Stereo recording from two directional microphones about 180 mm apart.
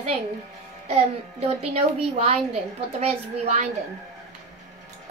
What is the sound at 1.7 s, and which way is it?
A woman's voice, 35° right (ahead or behind).